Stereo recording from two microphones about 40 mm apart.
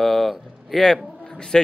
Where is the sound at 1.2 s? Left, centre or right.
Left.